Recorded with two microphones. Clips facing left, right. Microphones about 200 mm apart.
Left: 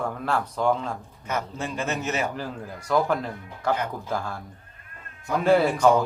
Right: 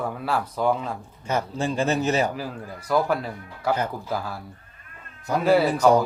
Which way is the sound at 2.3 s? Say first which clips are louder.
Right 1 dB; 5° right (ahead or behind).